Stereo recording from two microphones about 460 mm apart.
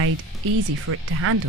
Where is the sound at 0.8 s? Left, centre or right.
Right.